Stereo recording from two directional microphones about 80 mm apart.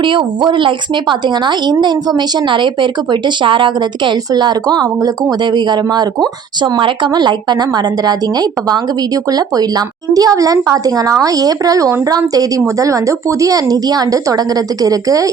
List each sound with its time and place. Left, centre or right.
0.0 s speech: right
4.3 s speech: right
6.6 s speech: right
8.0 s a woman's voice: right